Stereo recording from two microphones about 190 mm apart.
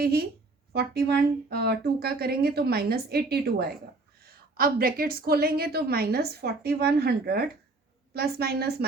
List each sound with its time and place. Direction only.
0.0 s a woman's voice: 55° right (ahead or behind)